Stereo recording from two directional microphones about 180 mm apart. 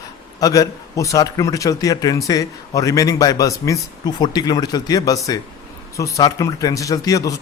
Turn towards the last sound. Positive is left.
turn(degrees=20)  # may be behind; listen again after turning